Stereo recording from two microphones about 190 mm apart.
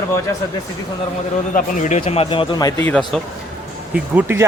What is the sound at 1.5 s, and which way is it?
Speech, 40° left (ahead or behind).